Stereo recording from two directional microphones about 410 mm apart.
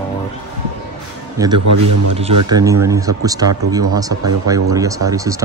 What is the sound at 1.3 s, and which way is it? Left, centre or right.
Speech, centre.